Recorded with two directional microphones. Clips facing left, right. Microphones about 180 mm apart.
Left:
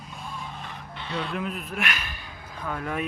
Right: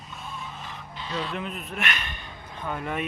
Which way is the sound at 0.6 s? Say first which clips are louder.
Even; 60° left (ahead or behind).